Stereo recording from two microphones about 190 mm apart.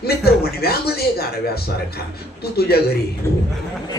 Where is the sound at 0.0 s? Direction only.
55° left (ahead or behind).